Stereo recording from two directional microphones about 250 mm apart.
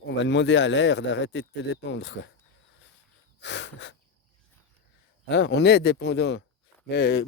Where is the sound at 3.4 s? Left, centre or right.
Left.